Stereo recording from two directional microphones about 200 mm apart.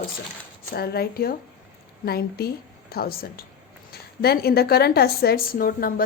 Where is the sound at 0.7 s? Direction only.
50° left (ahead or behind).